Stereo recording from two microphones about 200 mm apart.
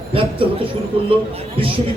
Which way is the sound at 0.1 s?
25° right (ahead or behind).